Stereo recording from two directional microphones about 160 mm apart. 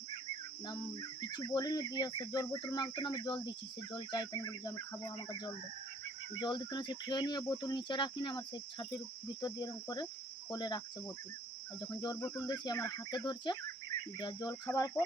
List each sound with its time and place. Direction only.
1.2 s speech: 25° left (ahead or behind)
6.4 s speech: 30° left (ahead or behind)
12.4 s speech: 25° left (ahead or behind)